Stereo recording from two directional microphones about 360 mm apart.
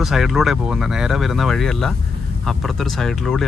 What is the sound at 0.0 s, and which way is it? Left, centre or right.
Speech, centre.